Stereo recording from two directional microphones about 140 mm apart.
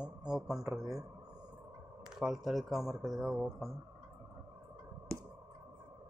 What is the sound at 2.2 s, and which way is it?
Speech, centre (ahead or behind).